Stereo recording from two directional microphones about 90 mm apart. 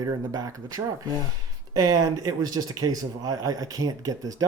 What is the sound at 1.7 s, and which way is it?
Speech, 45° right (ahead or behind).